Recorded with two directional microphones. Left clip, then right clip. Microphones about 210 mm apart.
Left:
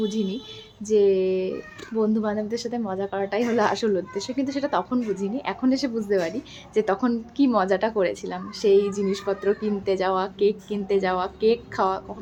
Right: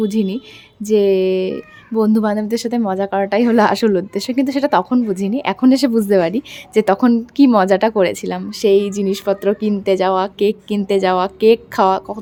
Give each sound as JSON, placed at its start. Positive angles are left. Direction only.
{"t": 0.0, "sound": "speech", "side_deg": -45}